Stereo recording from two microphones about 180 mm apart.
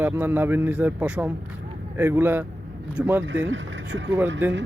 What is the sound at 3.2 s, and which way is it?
Speech, 90° right.